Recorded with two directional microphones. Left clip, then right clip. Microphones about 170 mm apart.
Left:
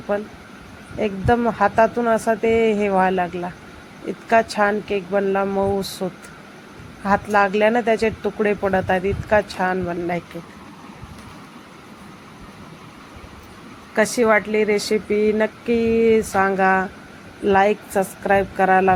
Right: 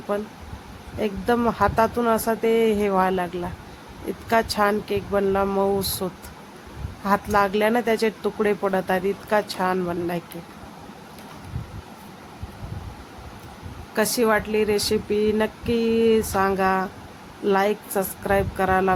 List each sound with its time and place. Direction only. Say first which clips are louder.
0.1 s speech: left 3 dB; 5° right (ahead or behind)
13.9 s speech: left 4 dB; 5° left (ahead or behind)